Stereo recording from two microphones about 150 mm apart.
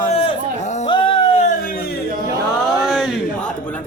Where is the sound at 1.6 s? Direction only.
80° left.